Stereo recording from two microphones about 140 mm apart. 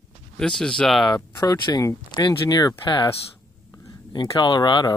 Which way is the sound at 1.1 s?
30° left (ahead or behind).